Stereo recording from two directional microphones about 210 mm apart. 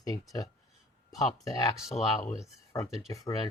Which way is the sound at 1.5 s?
15° left (ahead or behind).